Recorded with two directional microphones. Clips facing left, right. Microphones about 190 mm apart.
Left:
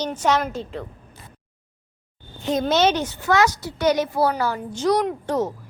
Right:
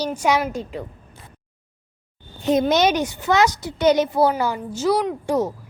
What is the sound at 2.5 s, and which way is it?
A woman's voice, 15° right (ahead or behind).